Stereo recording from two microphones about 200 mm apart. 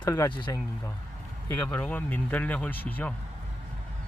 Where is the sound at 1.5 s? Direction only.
10° left (ahead or behind).